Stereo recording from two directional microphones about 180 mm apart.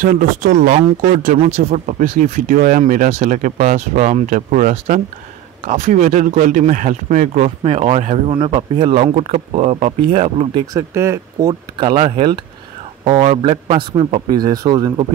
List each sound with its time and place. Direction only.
0.0 s speech: 50° right (ahead or behind)
8.4 s speech: 25° right (ahead or behind)
10.7 s speech: 15° right (ahead or behind)
11.8 s a man's voice: 25° right (ahead or behind)